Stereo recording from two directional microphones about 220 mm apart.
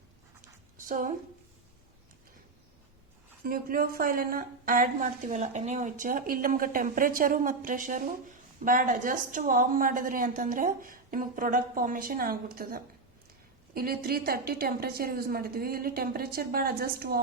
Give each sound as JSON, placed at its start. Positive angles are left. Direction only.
{"t": 0.9, "sound": "a woman's voice", "side_deg": -35}
{"t": 3.4, "sound": "a woman's voice", "side_deg": -40}